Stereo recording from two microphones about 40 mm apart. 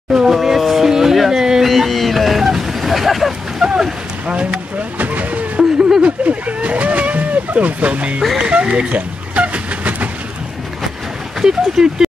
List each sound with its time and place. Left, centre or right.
0.3 s speech: centre
0.6 s a sound: centre
1.7 s vehicle: centre
4.9 s vehicle: right
5.6 s a sound: centre
6.2 s vehicle: right
8.4 s music: right
8.8 s a sound: right
11.4 s speech: centre